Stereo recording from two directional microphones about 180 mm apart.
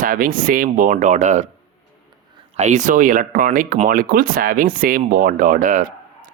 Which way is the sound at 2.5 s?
40° right (ahead or behind).